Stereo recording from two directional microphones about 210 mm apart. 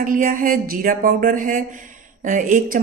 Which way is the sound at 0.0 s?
40° right (ahead or behind).